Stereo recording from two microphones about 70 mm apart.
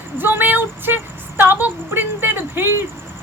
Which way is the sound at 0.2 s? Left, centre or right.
Right.